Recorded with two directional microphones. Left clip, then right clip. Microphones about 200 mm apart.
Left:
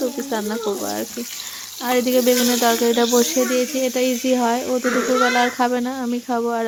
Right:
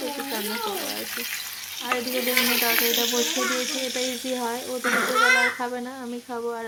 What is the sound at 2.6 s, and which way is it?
Speech, 35° left (ahead or behind).